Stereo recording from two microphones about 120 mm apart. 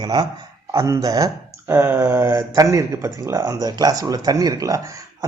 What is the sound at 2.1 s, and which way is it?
Speech, 30° right (ahead or behind).